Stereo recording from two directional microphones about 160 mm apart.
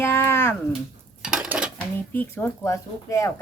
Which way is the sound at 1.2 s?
5° right (ahead or behind).